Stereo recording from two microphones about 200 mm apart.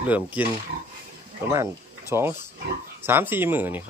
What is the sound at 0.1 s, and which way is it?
Speech, 5° right (ahead or behind).